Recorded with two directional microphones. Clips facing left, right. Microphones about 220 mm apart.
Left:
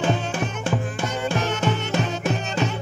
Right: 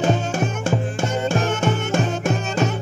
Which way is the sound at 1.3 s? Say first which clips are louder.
Right 1 dB; 50° right (ahead or behind).